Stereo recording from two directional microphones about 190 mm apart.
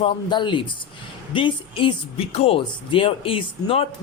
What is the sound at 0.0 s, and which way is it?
Speech, 25° left (ahead or behind).